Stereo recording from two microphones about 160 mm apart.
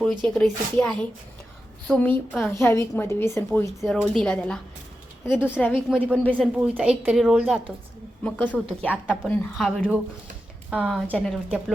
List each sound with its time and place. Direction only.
0.0 s a woman's voice: 5° left (ahead or behind)
3.8 s a woman's voice: centre (ahead or behind)
6.6 s a woman's voice: 5° right (ahead or behind)